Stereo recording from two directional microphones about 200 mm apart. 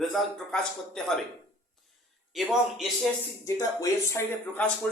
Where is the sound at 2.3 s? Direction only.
Centre (ahead or behind).